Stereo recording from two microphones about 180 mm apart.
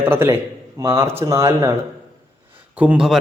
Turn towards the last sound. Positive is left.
turn(degrees=0)  # may be behind; listen again after turning